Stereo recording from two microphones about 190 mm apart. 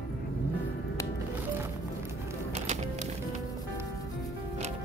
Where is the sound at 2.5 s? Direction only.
35° right (ahead or behind).